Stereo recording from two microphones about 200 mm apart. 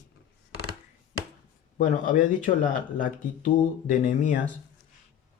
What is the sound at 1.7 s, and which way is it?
Speech, 40° left (ahead or behind).